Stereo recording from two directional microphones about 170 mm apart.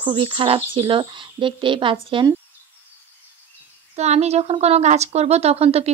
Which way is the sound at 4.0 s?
40° right (ahead or behind).